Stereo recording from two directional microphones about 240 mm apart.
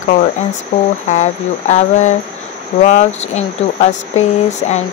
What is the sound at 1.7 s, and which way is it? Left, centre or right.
Speech, left.